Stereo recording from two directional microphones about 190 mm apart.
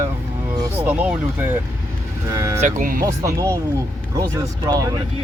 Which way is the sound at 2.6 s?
45° right (ahead or behind).